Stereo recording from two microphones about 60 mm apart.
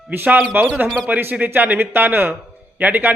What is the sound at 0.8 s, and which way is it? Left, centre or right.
Speech, centre.